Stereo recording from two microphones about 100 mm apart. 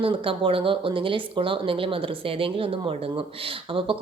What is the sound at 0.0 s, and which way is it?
Speech, 65° right (ahead or behind).